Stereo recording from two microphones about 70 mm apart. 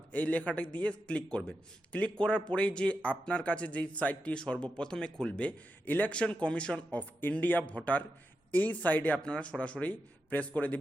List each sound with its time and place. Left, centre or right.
0.1 s speech: centre